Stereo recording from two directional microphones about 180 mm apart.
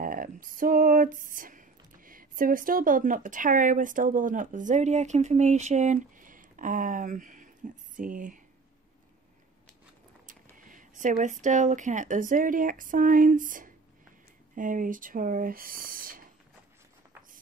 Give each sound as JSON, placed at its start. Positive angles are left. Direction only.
{"t": 0.0, "sound": "speech", "side_deg": -50}
{"t": 10.2, "sound": "speech", "side_deg": -45}